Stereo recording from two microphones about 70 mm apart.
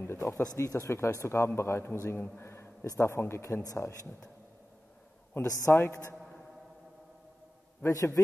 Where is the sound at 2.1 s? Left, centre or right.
Left.